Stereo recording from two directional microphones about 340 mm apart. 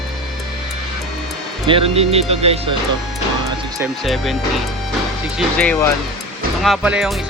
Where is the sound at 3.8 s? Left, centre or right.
Centre.